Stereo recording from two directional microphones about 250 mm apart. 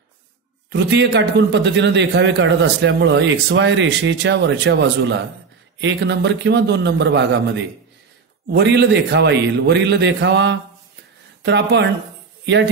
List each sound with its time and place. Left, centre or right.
0.7 s a man's voice: right
8.5 s a man's voice: right